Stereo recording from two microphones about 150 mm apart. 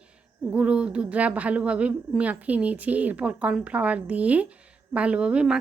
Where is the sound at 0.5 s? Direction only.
10° right (ahead or behind).